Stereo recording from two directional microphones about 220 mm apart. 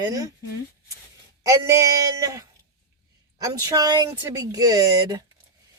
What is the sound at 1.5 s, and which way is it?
Speech, 15° right (ahead or behind).